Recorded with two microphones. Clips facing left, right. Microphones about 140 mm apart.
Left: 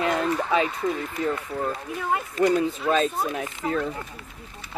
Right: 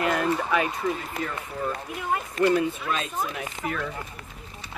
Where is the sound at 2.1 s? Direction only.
25° left (ahead or behind).